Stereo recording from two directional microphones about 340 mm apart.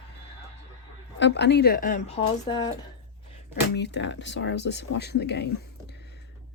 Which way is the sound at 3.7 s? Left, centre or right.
Left.